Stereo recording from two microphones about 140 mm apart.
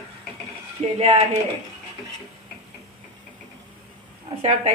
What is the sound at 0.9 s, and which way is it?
Speech, 50° right (ahead or behind).